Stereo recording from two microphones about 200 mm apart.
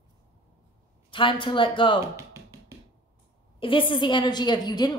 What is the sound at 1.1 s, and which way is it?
Speech, 25° left (ahead or behind).